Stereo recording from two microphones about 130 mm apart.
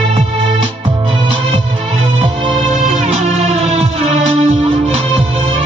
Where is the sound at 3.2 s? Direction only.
50° right (ahead or behind).